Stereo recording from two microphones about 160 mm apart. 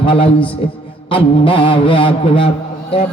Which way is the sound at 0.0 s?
35° left (ahead or behind).